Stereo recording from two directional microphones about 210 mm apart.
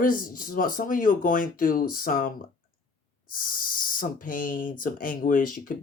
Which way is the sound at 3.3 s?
40° left (ahead or behind).